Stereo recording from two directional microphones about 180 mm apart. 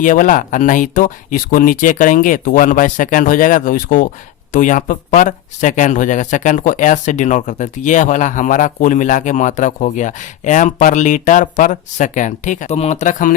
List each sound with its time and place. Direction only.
0.0 s speech: 45° left (ahead or behind)